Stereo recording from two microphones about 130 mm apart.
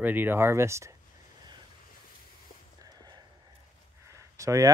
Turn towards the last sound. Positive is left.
turn(degrees=-25)  # may be behind; listen again after turning